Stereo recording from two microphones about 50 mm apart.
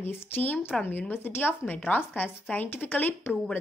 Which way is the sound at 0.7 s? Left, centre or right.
Centre.